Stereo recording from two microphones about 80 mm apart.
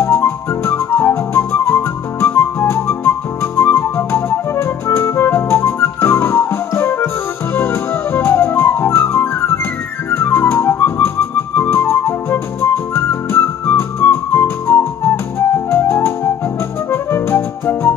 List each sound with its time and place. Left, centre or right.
0.0 s music: left